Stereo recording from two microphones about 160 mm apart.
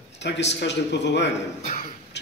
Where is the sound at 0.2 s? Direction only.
90° left.